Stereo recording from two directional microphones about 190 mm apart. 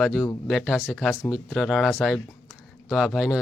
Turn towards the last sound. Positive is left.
turn(degrees=0)  # may be behind; listen again after turning